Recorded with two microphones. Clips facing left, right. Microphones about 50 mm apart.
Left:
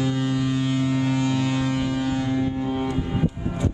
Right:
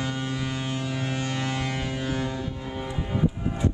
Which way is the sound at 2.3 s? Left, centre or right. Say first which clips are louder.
Left 8 dB; left.